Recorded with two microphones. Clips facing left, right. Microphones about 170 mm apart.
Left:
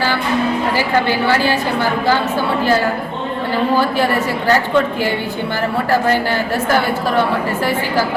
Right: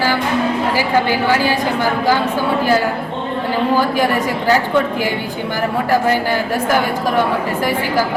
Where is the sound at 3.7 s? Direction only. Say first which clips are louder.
Even; 15° right (ahead or behind).